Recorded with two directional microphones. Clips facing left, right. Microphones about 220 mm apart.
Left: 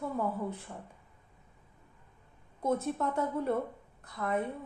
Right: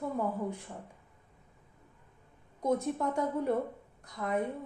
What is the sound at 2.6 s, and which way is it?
A woman's voice, 15° right (ahead or behind).